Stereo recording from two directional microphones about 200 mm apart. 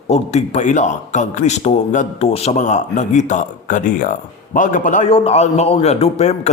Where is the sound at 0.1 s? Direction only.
35° left (ahead or behind).